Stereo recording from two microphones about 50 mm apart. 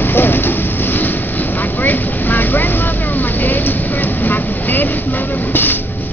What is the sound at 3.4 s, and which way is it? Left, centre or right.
A man's voice, left.